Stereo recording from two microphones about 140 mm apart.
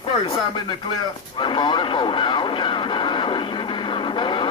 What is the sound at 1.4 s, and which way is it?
Vehicle, 35° left (ahead or behind).